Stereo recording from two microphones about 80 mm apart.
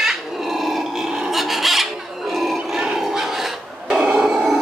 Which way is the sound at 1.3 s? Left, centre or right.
Centre.